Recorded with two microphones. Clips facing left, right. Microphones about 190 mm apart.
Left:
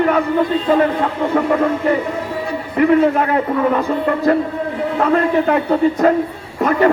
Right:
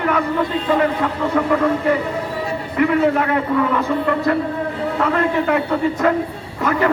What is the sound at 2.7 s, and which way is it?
Speech, 30° left (ahead or behind).